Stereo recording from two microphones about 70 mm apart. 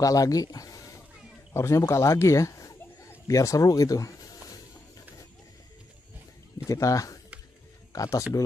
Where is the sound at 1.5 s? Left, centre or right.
Left.